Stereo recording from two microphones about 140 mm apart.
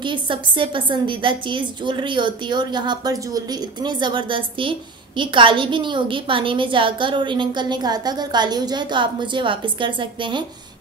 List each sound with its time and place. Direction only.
0.0 s a woman's voice: 35° right (ahead or behind)